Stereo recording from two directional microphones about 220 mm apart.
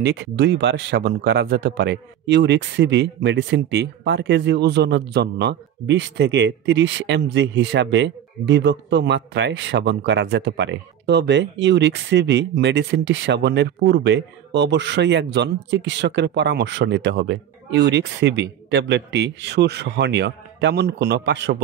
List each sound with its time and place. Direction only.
0.0 s speech: 50° right (ahead or behind)